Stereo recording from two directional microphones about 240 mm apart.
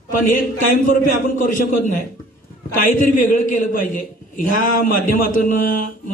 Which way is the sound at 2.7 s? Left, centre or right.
Left.